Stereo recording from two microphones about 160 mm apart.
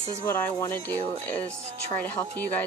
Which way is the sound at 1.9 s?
10° left (ahead or behind).